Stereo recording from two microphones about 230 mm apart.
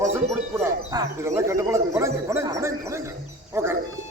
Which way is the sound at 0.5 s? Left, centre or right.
Centre.